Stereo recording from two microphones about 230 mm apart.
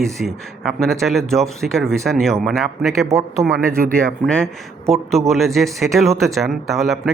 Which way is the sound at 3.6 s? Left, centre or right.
Right.